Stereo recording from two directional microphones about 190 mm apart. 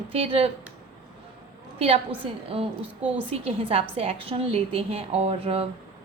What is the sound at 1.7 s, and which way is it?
Speech, 30° right (ahead or behind).